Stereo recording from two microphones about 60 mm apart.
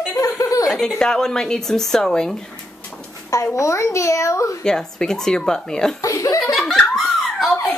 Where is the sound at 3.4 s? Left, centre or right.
Left.